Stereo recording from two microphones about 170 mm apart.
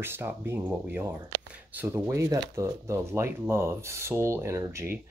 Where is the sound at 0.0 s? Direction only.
15° right (ahead or behind).